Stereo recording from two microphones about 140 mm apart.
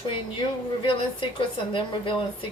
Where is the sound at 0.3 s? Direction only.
35° left (ahead or behind).